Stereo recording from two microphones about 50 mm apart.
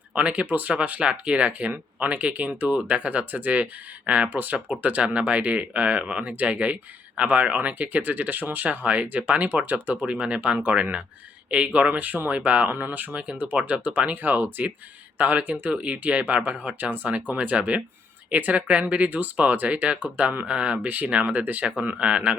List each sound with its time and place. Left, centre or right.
0.1 s speech: right